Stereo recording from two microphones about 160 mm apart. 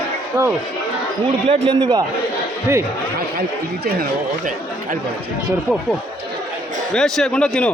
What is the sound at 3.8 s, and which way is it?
Speech, 60° right (ahead or behind).